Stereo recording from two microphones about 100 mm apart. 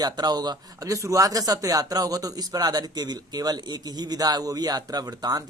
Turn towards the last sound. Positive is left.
turn(degrees=-40)  # may be behind; listen again after turning